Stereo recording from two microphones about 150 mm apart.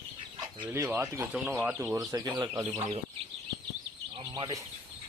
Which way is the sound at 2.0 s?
25° right (ahead or behind).